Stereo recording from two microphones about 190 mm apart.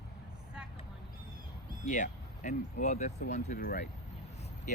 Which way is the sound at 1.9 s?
45° left (ahead or behind).